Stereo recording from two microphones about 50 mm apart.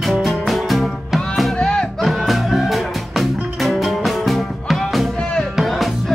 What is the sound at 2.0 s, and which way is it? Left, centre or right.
Music, centre.